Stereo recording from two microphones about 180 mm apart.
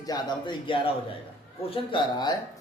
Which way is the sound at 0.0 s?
25° left (ahead or behind).